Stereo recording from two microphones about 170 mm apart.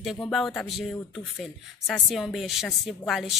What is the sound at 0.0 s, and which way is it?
A woman's voice, centre (ahead or behind).